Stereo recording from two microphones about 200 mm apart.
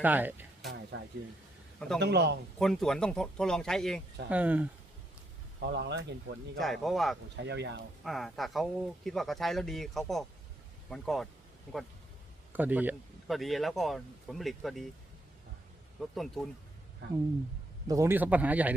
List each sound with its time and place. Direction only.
0.0 s speech: 10° right (ahead or behind)
0.9 s speech: 65° right (ahead or behind)
2.0 s speech: 55° right (ahead or behind)
2.6 s speech: centre (ahead or behind)
4.3 s speech: 10° right (ahead or behind)
5.6 s speech: 60° right (ahead or behind)
6.6 s speech: centre (ahead or behind)
7.4 s speech: 60° right (ahead or behind)
8.0 s speech: centre (ahead or behind)
12.5 s speech: 10° right (ahead or behind)
16.0 s speech: centre (ahead or behind)
17.0 s speech: 55° right (ahead or behind)
17.8 s speech: 15° right (ahead or behind)